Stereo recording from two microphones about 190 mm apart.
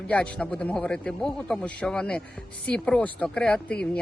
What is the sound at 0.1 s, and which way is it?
Speech, 5° left (ahead or behind).